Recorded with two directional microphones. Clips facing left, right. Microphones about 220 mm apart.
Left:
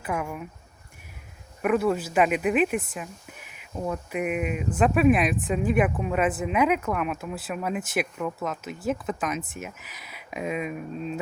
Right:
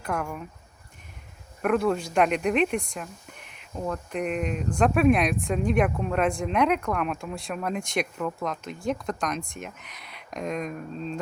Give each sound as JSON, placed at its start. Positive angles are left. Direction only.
{"t": 0.0, "sound": "speech", "side_deg": 5}
{"t": 1.6, "sound": "speech", "side_deg": 5}